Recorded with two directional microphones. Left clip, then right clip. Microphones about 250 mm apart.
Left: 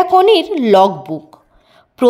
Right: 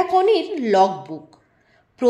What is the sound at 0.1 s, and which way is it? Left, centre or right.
A woman's voice, left.